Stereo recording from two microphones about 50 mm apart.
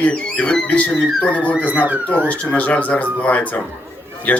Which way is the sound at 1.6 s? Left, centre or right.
Left.